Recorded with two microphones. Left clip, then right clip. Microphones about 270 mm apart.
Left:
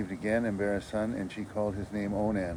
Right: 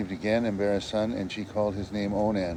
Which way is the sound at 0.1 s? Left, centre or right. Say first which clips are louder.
Right 4 dB; centre.